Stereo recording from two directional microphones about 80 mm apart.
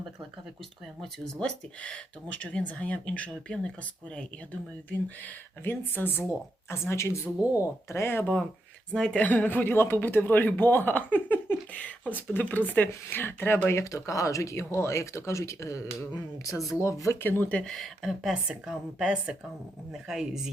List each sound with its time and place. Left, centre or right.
1.0 s speech: centre
4.9 s speech: left
8.9 s speech: centre
13.7 s speech: left
16.8 s speech: left
17.2 s speech: left
17.7 s speech: centre